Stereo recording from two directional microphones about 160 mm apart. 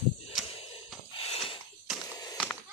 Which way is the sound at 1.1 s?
40° left (ahead or behind).